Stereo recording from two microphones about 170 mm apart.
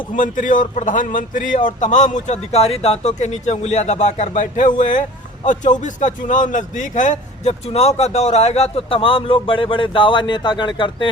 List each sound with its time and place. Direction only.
0.2 s a man's voice: 50° left (ahead or behind); by 11.1 s 30° left (ahead or behind)